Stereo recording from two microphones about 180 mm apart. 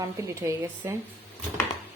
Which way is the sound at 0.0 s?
15° right (ahead or behind).